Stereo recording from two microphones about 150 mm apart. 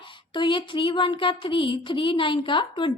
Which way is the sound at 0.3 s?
35° left (ahead or behind).